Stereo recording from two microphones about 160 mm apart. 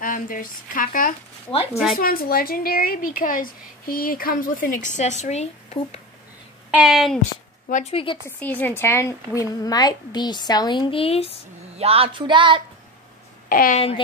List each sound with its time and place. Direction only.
0.0 s speech: 60° left (ahead or behind)
1.5 s speech: 35° left (ahead or behind)
2.0 s speech: 65° left (ahead or behind); by 5.9 s 40° left (ahead or behind)
6.7 s a woman's voice: 5° right (ahead or behind)
7.7 s speech: 40° left (ahead or behind)
8.3 s speech: 10° left (ahead or behind); by 11.3 s 35° left (ahead or behind)
11.8 s speech: 35° right (ahead or behind)
13.5 s a woman's voice: 60° left (ahead or behind)
13.7 s speech: 40° left (ahead or behind)